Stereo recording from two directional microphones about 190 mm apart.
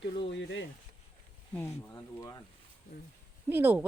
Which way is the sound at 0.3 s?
70° left (ahead or behind).